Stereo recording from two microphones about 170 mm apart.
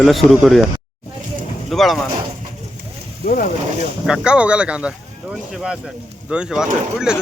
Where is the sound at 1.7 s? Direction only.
Centre (ahead or behind).